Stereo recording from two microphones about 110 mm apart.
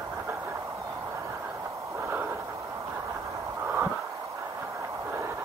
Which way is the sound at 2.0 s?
20° right (ahead or behind).